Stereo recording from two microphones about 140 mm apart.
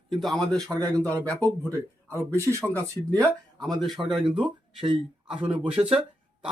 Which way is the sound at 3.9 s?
Centre (ahead or behind).